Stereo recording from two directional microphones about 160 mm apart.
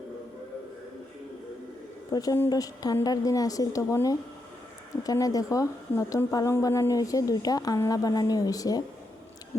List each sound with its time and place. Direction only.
2.0 s a woman's voice: 25° left (ahead or behind)